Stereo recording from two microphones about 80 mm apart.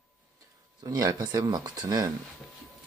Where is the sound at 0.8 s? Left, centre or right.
Right.